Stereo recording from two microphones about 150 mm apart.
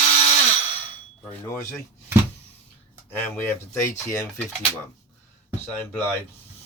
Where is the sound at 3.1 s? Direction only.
15° left (ahead or behind).